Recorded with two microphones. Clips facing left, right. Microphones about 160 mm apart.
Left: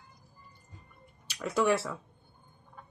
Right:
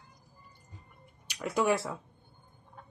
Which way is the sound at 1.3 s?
15° right (ahead or behind).